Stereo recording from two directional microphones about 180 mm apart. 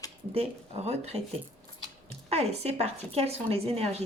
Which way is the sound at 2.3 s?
35° right (ahead or behind).